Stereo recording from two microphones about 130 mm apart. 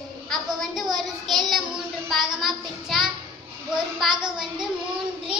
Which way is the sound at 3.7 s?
5° right (ahead or behind).